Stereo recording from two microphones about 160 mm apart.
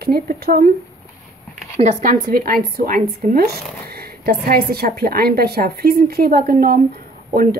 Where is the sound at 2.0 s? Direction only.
60° right (ahead or behind).